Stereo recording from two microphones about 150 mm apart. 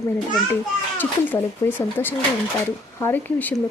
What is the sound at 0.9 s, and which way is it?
Speech, 15° left (ahead or behind).